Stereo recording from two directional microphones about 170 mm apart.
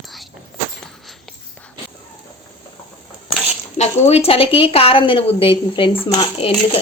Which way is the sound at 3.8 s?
40° left (ahead or behind).